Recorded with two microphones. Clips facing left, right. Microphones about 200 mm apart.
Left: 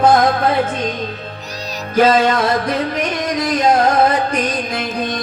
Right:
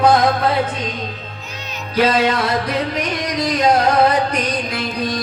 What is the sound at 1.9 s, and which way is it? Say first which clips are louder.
Music: left 3 dB; 50° left (ahead or behind).